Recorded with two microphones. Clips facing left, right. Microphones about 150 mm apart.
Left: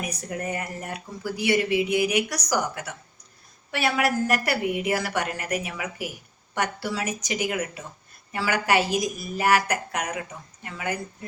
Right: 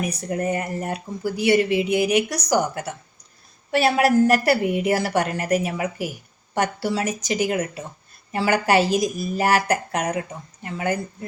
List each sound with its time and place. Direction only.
0.0 s a woman's voice: 30° right (ahead or behind)